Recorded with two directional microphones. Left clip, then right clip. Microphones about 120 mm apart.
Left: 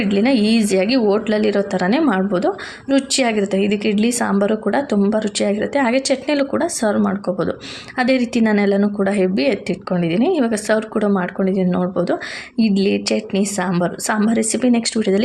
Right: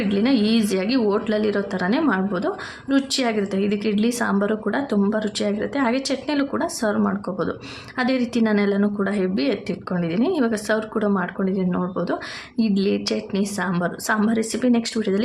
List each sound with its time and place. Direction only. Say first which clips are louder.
0.0 s a woman's voice: left 4 dB; 25° left (ahead or behind)